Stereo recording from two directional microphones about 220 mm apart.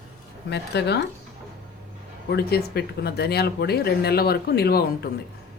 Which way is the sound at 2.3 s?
45° left (ahead or behind).